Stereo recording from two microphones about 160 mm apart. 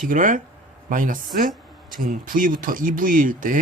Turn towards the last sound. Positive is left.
turn(degrees=-55)  # may be behind; listen again after turning